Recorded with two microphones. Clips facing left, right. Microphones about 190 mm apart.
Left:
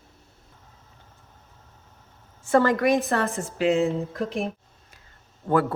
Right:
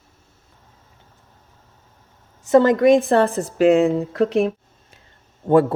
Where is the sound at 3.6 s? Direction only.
60° right (ahead or behind); by 4.5 s 80° right.